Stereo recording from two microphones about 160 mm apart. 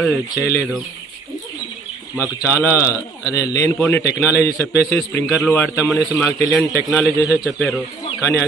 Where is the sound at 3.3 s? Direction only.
20° left (ahead or behind).